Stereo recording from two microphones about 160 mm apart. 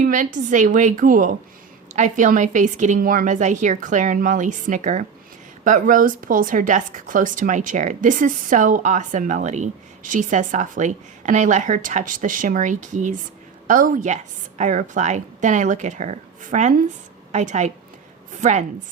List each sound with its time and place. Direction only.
0.0 s a woman's voice: 55° right (ahead or behind)